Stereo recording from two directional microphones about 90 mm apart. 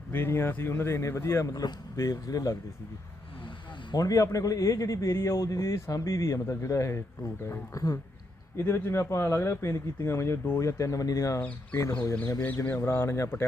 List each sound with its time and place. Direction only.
0.1 s a man's voice: 25° left (ahead or behind)
3.9 s a man's voice: 40° left (ahead or behind)
12.6 s speech: 25° left (ahead or behind)